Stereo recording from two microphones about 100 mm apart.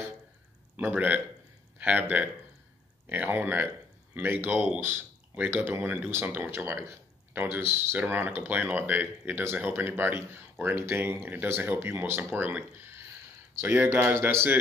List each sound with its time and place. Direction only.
0.7 s a man's voice: 15° right (ahead or behind)